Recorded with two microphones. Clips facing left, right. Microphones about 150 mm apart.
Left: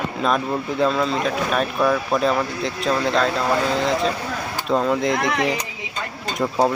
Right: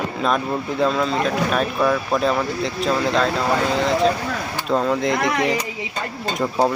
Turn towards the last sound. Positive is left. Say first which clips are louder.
# even
turn(degrees=0)  # may be behind; listen again after turning